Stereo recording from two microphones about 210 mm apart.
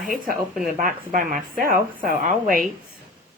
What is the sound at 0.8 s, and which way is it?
A woman's voice, 40° right (ahead or behind).